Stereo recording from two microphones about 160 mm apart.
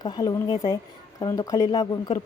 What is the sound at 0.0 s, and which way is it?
A woman's voice, 25° left (ahead or behind).